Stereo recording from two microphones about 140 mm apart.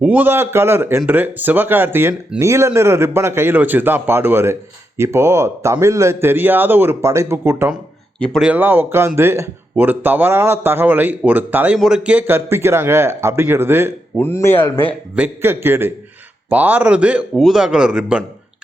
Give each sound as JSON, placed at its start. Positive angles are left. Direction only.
{"t": 0.0, "sound": "speech", "side_deg": -10}
{"t": 8.2, "sound": "speech", "side_deg": 5}
{"t": 8.4, "sound": "speech", "side_deg": -15}
{"t": 14.2, "sound": "speech", "side_deg": 15}
{"t": 15.1, "sound": "speech", "side_deg": -15}